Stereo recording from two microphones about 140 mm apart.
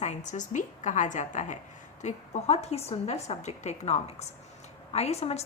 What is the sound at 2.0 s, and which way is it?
A woman's voice, 50° left (ahead or behind).